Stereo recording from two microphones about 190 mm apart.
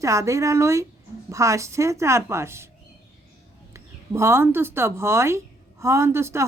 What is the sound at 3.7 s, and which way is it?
Speech, 15° right (ahead or behind).